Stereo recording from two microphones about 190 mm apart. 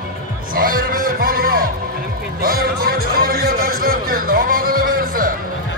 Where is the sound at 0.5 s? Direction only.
50° right (ahead or behind).